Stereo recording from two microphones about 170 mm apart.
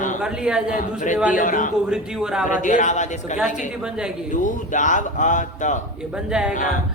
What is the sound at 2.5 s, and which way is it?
Speech, 50° left (ahead or behind).